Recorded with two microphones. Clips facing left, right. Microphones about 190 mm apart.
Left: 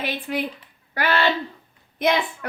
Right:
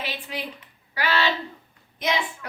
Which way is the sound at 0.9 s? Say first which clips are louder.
Left 3 dB; 55° left (ahead or behind).